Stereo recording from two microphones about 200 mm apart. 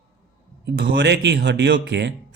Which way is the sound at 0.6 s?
55° right (ahead or behind).